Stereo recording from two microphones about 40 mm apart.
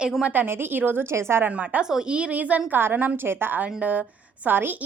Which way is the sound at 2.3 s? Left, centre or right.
Right.